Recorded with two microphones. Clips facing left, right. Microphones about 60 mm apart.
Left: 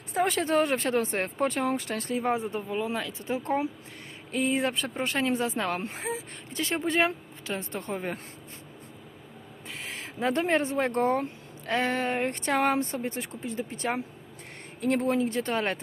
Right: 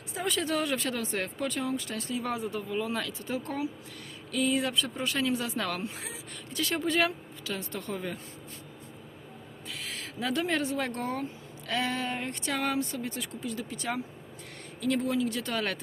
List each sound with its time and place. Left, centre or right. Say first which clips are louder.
0.1 s a sound: left 5 dB; left
0.4 s speech: left 5 dB; left
9.6 s speech: left 1 dB; left